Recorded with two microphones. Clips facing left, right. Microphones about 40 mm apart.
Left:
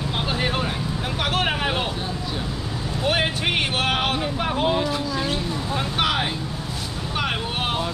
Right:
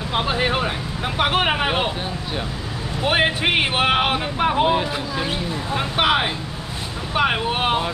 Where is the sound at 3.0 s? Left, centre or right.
Right.